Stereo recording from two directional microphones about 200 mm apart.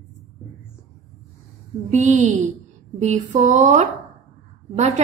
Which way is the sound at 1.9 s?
35° right (ahead or behind).